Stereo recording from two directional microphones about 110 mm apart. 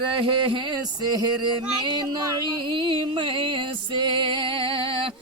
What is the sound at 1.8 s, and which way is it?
Music, 40° right (ahead or behind).